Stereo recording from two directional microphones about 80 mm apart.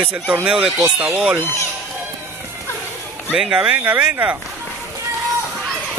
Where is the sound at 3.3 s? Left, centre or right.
Centre.